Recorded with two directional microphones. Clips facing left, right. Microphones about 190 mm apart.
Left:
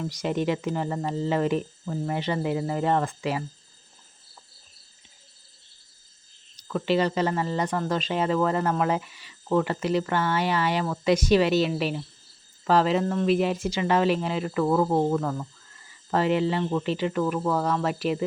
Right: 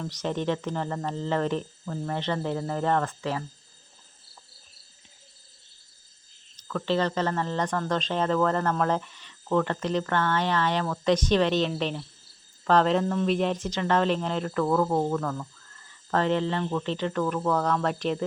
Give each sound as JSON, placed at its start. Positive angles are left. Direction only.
{"t": 0.0, "sound": "speech", "side_deg": 10}
{"t": 6.6, "sound": "speech", "side_deg": 15}